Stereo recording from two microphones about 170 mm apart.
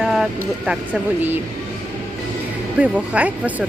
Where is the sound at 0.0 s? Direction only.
Centre (ahead or behind).